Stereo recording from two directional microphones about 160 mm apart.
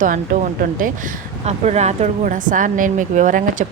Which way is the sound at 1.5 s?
45° right (ahead or behind).